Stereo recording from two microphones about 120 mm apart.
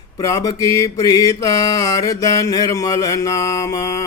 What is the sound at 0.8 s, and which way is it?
Mantra, 30° left (ahead or behind).